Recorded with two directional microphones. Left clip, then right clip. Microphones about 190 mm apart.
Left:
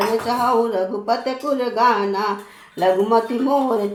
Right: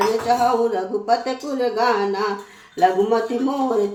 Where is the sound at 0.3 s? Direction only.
25° left (ahead or behind).